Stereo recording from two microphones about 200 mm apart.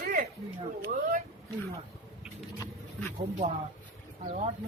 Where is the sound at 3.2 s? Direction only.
30° right (ahead or behind).